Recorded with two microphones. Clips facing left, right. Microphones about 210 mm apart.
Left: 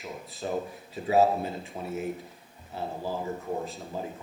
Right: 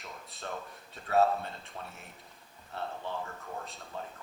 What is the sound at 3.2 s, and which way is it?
Speech, 20° left (ahead or behind).